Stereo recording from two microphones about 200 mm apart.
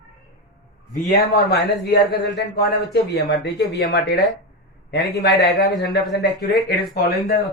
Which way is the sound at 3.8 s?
55° left (ahead or behind).